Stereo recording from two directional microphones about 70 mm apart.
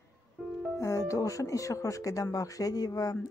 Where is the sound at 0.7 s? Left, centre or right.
Left.